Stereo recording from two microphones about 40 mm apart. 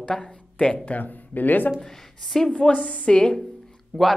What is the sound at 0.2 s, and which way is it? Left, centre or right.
Speech, left.